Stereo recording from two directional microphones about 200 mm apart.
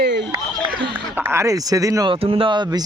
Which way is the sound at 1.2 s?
10° right (ahead or behind).